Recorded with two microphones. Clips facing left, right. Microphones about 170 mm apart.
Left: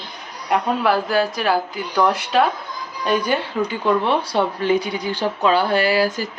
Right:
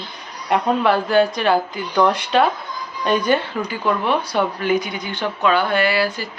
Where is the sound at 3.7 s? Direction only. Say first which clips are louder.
Left 1 dB; 30° left (ahead or behind).